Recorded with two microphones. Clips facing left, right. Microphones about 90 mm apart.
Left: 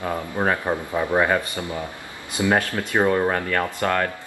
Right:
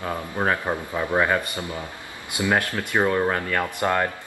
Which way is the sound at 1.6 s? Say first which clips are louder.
Left 2 dB; 5° right (ahead or behind).